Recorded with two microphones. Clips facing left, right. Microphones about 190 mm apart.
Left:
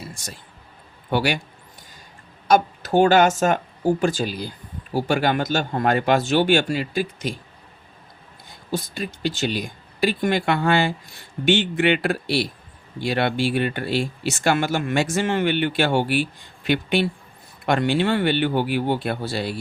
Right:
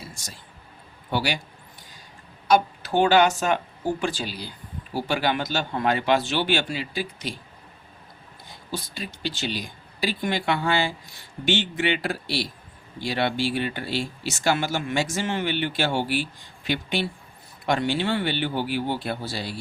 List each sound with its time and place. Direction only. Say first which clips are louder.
1.1 s speech: left 4 dB; 55° left (ahead or behind)
2.5 s speech: left 3 dB; 45° left (ahead or behind)
8.4 s speech: left 6 dB; 50° left (ahead or behind)